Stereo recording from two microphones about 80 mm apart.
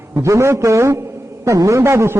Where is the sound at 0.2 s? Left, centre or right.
Right.